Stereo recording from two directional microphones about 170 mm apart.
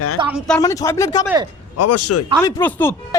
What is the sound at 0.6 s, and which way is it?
Speech, 20° left (ahead or behind).